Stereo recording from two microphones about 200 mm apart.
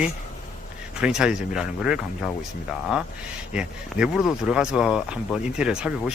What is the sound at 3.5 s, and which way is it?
Speech, 5° right (ahead or behind).